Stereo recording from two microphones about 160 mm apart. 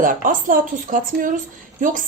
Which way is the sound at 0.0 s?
55° right (ahead or behind).